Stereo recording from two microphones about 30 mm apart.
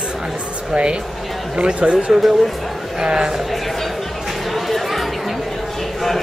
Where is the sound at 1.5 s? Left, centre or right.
Right.